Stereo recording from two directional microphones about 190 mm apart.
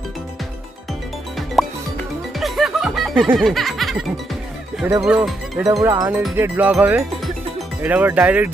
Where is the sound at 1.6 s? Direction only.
Centre (ahead or behind).